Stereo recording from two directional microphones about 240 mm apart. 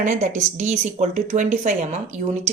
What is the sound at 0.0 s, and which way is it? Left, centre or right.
Speech, right.